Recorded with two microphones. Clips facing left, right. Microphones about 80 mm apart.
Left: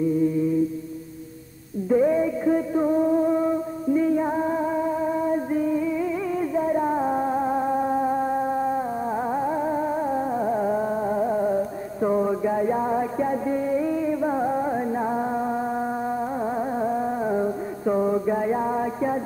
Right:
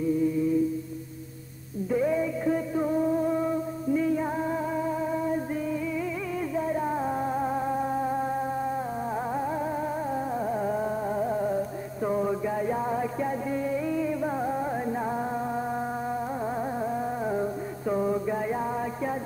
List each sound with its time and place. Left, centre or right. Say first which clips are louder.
1.9 s music: left 6 dB; left
16.8 s music: left 5 dB; left